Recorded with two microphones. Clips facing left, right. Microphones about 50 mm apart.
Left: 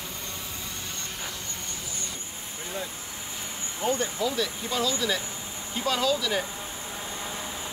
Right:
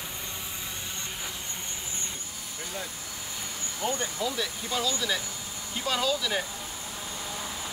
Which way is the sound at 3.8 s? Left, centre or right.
Centre.